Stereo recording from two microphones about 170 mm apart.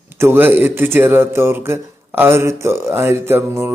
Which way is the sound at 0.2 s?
10° right (ahead or behind).